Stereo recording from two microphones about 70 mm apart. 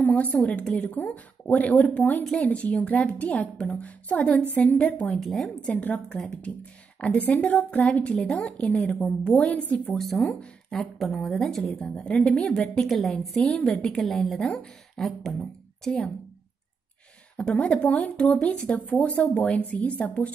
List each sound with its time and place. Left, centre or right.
0.0 s a sound: left
0.7 s speech: centre
5.2 s a woman's voice: centre
5.7 s a woman's voice: left
9.9 s a woman's voice: centre
10.4 s a woman's voice: centre
11.2 s a woman's voice: centre
12.0 s a woman's voice: centre
12.8 s a woman's voice: centre
17.4 s speech: centre